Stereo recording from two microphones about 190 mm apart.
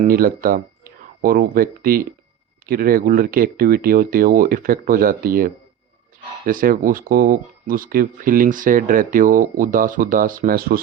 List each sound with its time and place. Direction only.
0.0 s speech: 50° right (ahead or behind)